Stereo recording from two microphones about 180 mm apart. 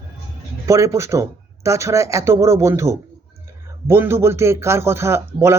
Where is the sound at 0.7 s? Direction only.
15° right (ahead or behind).